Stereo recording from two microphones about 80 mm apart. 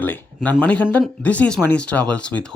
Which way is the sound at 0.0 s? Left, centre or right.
Left.